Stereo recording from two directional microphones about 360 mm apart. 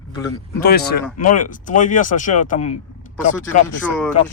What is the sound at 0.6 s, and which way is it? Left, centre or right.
Speech, left.